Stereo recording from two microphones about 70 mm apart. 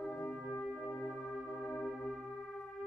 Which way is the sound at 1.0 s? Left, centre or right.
Centre.